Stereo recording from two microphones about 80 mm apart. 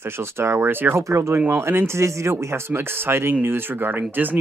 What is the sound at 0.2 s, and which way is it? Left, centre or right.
Speech, right.